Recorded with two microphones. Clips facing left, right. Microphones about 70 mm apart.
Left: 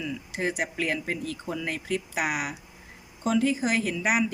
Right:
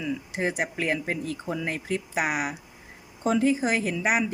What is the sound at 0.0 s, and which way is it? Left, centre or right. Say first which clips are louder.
Speech: right 2 dB; right.